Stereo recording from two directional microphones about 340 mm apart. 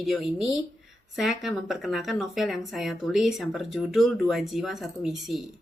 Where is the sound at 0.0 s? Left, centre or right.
Centre.